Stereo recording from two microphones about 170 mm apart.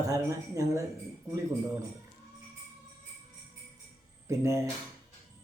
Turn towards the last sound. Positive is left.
turn(degrees=-15)  # may be behind; listen again after turning